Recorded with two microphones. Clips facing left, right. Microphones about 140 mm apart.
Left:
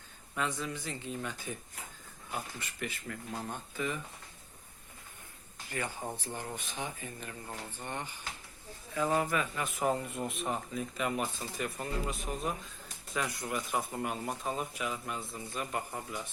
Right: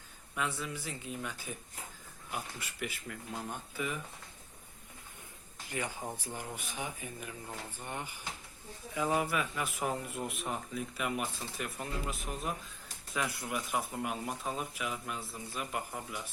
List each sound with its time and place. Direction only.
0.6 s speech: 10° right (ahead or behind)
5.7 s a man's voice: 15° right (ahead or behind)